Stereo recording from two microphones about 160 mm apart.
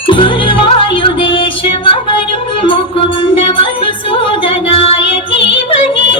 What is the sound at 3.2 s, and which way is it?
Music, 35° left (ahead or behind).